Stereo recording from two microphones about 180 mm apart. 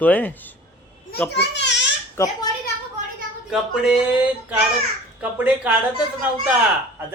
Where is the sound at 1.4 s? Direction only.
75° left (ahead or behind).